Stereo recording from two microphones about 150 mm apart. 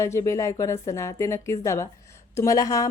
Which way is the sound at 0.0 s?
20° left (ahead or behind).